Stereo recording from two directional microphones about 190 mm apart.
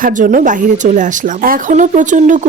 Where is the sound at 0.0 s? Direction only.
45° right (ahead or behind).